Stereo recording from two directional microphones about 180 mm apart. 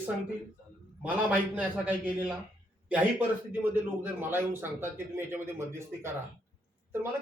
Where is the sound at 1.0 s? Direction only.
10° right (ahead or behind).